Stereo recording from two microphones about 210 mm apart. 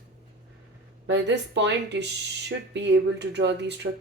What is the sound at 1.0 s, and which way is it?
A woman's voice, 55° right (ahead or behind).